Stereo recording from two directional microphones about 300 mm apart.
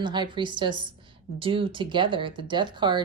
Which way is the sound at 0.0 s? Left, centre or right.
Centre.